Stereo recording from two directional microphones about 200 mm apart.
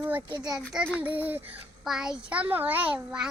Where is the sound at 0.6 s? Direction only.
Centre (ahead or behind).